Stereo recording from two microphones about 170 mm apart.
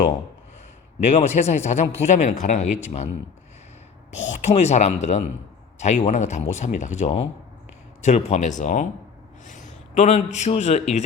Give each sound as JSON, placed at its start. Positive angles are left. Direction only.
{"t": 1.1, "sound": "speech", "side_deg": 40}
{"t": 4.1, "sound": "speech", "side_deg": 45}
{"t": 9.5, "sound": "a sound", "side_deg": 45}
{"t": 10.3, "sound": "speech", "side_deg": 40}